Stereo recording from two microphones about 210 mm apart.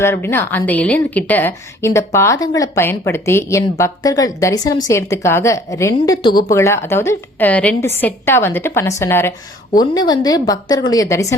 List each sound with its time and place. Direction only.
0.0 s a woman's voice: 10° left (ahead or behind)